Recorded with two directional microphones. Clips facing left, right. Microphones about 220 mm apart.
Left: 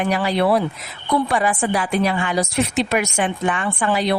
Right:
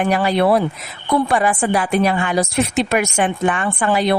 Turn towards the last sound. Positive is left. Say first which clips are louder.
# right 3 dB
turn(degrees=-50)  # may be behind; listen again after turning